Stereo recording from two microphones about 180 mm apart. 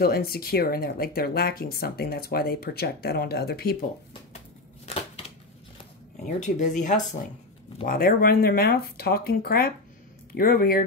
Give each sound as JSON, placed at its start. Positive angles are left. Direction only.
{"t": 0.0, "sound": "speech", "side_deg": 60}
{"t": 4.8, "sound": "a sound", "side_deg": 35}
{"t": 6.2, "sound": "speech", "side_deg": 45}